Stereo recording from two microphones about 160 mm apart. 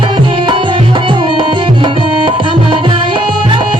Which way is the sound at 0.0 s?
30° right (ahead or behind).